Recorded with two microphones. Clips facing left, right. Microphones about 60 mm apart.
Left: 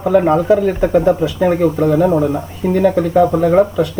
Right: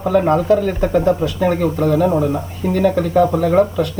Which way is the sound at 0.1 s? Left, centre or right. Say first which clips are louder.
Left 2 dB; centre.